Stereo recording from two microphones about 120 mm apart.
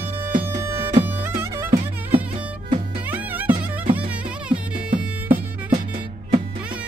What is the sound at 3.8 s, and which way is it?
Music, 50° right (ahead or behind).